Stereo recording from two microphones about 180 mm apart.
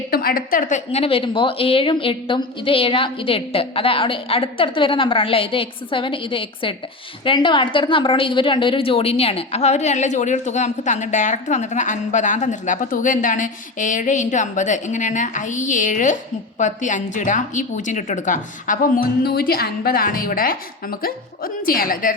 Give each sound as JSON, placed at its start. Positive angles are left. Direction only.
{"t": 0.1, "sound": "a woman's voice", "side_deg": 55}